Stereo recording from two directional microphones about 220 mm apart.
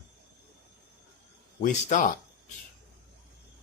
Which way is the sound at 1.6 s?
35° left (ahead or behind).